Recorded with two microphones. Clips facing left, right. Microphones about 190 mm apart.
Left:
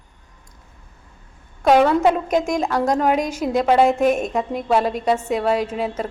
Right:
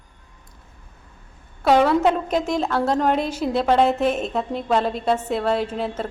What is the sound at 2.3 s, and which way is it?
Speech, 45° left (ahead or behind).